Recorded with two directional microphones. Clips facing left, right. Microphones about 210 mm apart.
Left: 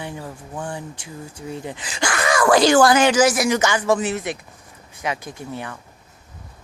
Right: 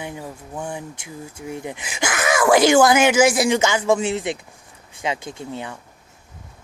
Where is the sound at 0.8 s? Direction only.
20° right (ahead or behind).